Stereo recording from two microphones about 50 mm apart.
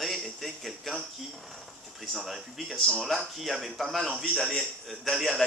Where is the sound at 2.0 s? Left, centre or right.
Centre.